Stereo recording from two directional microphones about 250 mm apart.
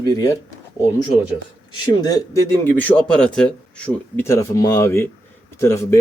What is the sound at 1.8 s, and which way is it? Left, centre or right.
Speech, centre.